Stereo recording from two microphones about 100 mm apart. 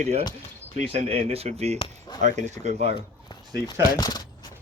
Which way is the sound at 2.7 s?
90° right.